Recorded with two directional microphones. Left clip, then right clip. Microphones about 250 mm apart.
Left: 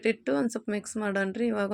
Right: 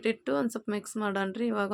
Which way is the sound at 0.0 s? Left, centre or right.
Centre.